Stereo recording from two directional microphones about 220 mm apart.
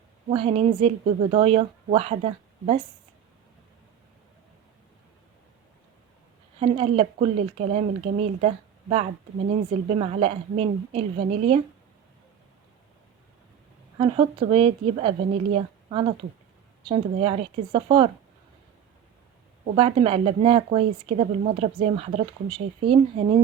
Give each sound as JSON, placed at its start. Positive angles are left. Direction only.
{"t": 0.3, "sound": "speech", "side_deg": -25}
{"t": 6.6, "sound": "speech", "side_deg": -25}
{"t": 14.0, "sound": "a woman's voice", "side_deg": -20}
{"t": 19.7, "sound": "speech", "side_deg": -25}